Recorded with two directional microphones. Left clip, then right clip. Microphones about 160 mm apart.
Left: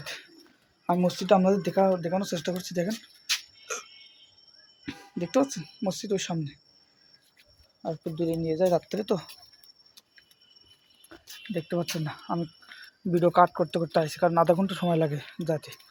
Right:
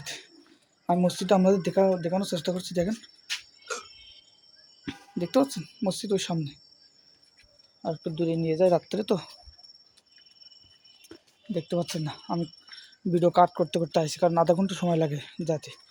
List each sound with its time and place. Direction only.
0.0 s bird: 15° right (ahead or behind)
0.9 s speech: 20° right (ahead or behind)
3.7 s a sound: 25° right (ahead or behind)
4.9 s speech: 30° right (ahead or behind)
7.8 s speech: 40° right (ahead or behind)
8.9 s speech: 25° right (ahead or behind)
11.1 s a sound: 30° right (ahead or behind)
11.5 s speech: 20° right (ahead or behind)